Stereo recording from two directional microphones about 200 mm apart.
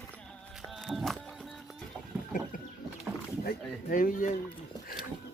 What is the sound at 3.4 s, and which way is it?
Speech, 45° left (ahead or behind).